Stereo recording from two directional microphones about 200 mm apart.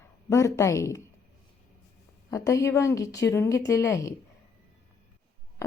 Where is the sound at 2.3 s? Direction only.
15° left (ahead or behind).